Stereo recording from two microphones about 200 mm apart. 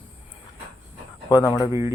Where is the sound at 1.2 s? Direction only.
20° left (ahead or behind).